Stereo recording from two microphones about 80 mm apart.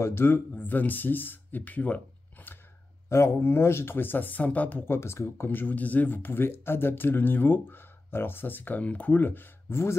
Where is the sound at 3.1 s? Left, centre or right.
Left.